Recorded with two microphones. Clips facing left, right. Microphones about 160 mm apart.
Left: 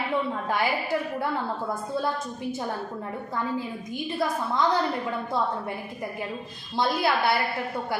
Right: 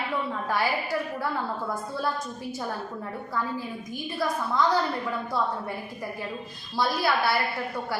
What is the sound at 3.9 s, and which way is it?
Speech, 20° left (ahead or behind).